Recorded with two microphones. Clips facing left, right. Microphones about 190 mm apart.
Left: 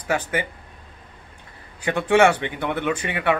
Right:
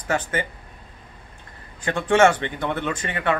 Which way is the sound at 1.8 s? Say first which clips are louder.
Even; 10° left (ahead or behind).